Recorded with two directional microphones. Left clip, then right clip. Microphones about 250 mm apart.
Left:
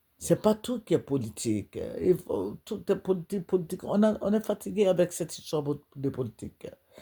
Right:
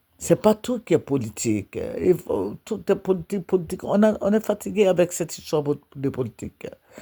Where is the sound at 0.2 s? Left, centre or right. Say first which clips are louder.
Right 6 dB; right.